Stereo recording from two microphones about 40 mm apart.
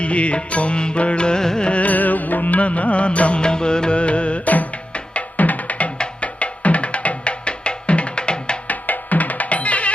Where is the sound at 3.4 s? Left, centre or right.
Left.